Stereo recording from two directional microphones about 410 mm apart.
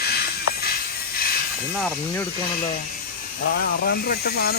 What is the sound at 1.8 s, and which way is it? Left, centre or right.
Speech, centre.